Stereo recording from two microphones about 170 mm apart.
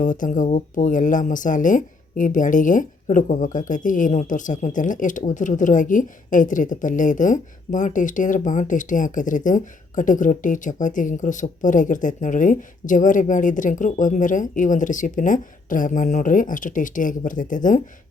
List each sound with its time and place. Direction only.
0.0 s speech: 50° left (ahead or behind)